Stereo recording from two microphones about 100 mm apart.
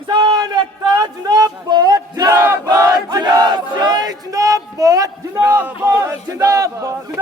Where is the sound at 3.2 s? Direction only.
45° right (ahead or behind).